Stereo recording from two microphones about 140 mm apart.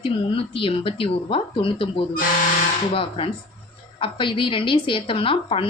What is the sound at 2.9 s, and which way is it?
A woman's voice, 40° left (ahead or behind).